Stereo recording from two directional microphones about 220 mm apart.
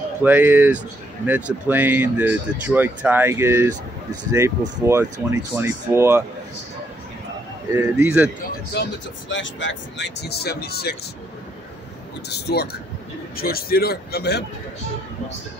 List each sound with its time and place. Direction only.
0.2 s speech: 10° right (ahead or behind)
8.0 s speech: 5° right (ahead or behind)
8.8 s speech: 50° left (ahead or behind)
12.3 s speech: 50° left (ahead or behind)